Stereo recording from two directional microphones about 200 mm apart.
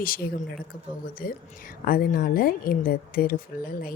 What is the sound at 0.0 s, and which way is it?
A woman's voice, 45° left (ahead or behind).